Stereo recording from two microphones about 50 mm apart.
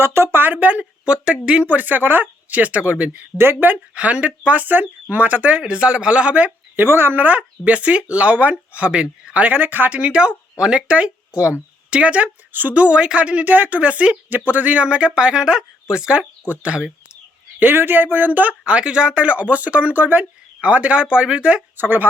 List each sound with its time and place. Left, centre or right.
0.0 s speech: right
0.4 s speech: right
1.6 s speech: right
3.3 s speech: right
3.9 s speech: right
4.4 s speech: right
6.7 s speech: right
10.0 s speech: right
12.5 s speech: right
12.7 s speech: right
14.3 s speech: right
17.6 s speech: right
18.6 s speech: right
21.8 s speech: right